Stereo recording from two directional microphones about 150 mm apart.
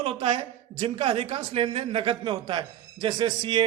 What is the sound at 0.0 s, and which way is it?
A woman's voice, 40° right (ahead or behind).